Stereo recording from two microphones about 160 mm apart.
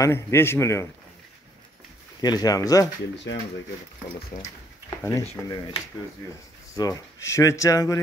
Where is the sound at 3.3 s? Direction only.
90° left.